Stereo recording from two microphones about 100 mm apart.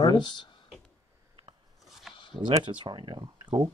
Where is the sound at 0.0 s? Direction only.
45° left (ahead or behind).